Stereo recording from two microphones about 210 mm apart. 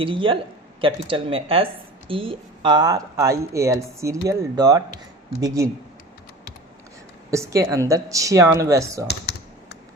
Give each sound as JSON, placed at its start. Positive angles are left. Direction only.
{"t": 0.0, "sound": "speech", "side_deg": -25}
{"t": 7.3, "sound": "a woman's voice", "side_deg": -15}